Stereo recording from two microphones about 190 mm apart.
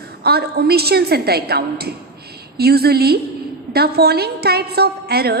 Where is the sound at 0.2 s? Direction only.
55° right (ahead or behind).